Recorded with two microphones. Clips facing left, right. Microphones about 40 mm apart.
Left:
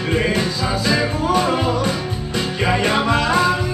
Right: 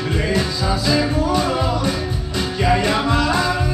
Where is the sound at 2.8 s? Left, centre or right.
Left.